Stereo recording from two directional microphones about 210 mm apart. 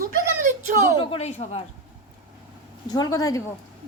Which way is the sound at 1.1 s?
30° left (ahead or behind).